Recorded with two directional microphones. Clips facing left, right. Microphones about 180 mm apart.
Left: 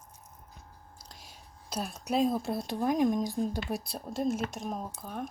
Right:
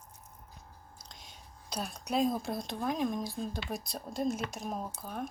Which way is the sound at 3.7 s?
5° left (ahead or behind).